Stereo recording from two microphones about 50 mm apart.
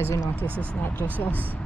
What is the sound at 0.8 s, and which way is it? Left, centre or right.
Speech, left.